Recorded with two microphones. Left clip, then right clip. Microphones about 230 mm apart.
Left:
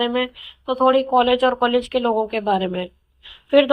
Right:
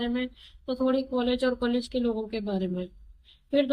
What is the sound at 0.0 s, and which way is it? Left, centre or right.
Speech, centre.